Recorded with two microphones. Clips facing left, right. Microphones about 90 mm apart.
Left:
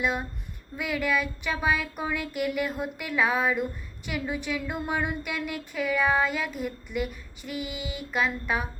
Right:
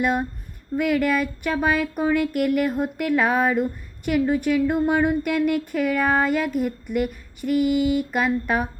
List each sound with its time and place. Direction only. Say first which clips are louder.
0.0 s speech: right 6 dB; 50° right (ahead or behind)